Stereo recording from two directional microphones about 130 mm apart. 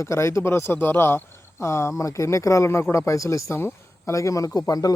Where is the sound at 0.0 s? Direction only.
20° left (ahead or behind).